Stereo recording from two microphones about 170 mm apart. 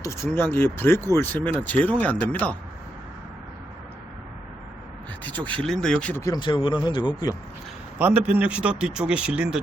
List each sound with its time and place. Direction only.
0.0 s speech: 15° left (ahead or behind)
5.2 s speech: 10° left (ahead or behind)
6.2 s speech: 25° left (ahead or behind)
7.9 s speech: 10° right (ahead or behind)